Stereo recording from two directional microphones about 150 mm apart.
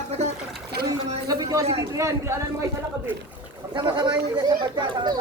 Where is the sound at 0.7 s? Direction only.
90° right.